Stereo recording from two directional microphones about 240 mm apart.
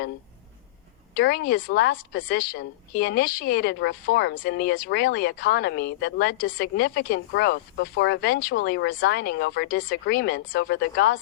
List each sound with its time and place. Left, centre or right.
1.1 s a woman's voice: left